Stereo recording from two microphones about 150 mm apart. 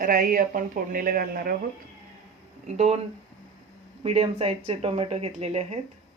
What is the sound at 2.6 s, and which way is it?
Speech, 50° right (ahead or behind).